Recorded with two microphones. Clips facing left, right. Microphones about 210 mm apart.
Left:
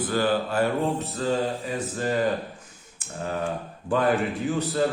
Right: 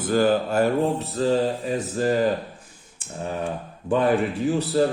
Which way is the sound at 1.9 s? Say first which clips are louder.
Right 5 dB; 35° right (ahead or behind).